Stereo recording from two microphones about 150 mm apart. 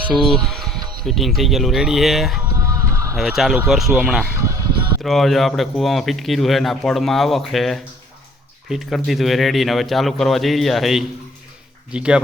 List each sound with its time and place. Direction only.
0.0 s speech: 5° right (ahead or behind)
2.6 s music: 20° right (ahead or behind)
3.2 s speech: centre (ahead or behind)
4.4 s music: 20° right (ahead or behind)
5.0 s speech: centre (ahead or behind)